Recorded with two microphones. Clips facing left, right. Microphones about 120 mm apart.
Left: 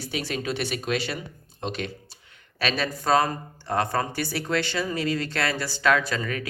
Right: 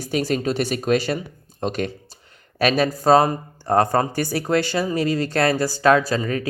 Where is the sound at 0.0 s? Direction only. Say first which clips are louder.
Right 8 dB; 40° right (ahead or behind).